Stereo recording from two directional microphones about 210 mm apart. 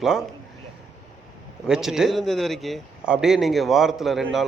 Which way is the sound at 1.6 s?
Centre (ahead or behind).